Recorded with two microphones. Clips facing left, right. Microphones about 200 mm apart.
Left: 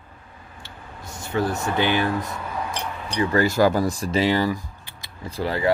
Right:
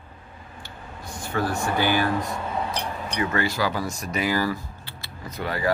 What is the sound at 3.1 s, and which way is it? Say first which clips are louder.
Speech: left 6 dB; 30° left (ahead or behind).